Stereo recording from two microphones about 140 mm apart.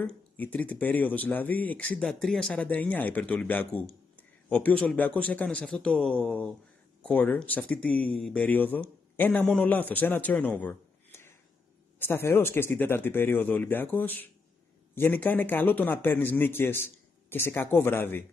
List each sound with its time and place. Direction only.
0.0 s speech: 10° left (ahead or behind)
12.0 s speech: 15° left (ahead or behind)